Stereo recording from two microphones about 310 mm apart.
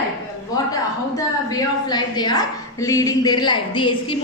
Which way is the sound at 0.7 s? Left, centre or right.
Centre.